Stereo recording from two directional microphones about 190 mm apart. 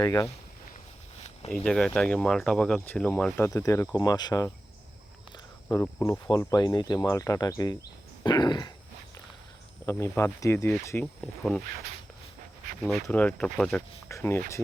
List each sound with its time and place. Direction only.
0.0 s speech: 15° left (ahead or behind)
1.2 s a sound: 35° left (ahead or behind)
1.5 s speech: 5° left (ahead or behind); by 4.4 s 20° left (ahead or behind)
5.6 s speech: 15° left (ahead or behind)
8.2 s throat clearing: 20° left (ahead or behind)
9.8 s speech: 15° left (ahead or behind)
12.8 s speech: 5° left (ahead or behind)